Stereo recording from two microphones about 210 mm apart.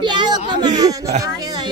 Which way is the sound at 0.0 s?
20° right (ahead or behind).